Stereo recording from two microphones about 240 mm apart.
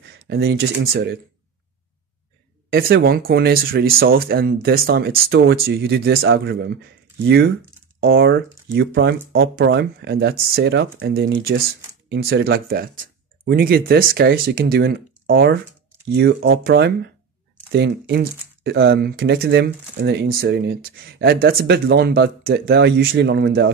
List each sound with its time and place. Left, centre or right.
0.0 s speech: right
2.7 s speech: right